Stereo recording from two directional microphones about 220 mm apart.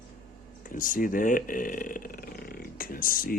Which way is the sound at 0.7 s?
35° left (ahead or behind).